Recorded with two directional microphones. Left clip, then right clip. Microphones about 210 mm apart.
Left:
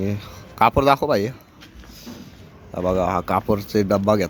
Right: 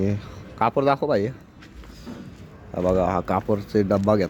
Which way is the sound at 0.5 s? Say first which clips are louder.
Left 4 dB; 10° left (ahead or behind).